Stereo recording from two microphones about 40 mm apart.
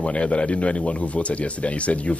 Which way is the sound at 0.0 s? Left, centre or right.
Left.